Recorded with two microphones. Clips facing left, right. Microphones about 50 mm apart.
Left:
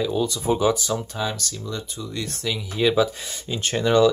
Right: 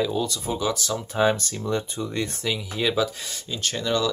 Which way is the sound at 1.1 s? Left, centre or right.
Right.